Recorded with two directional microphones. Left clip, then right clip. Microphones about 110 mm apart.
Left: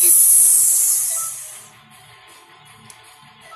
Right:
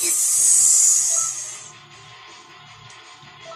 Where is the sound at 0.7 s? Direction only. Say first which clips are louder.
Right 5 dB; 25° right (ahead or behind).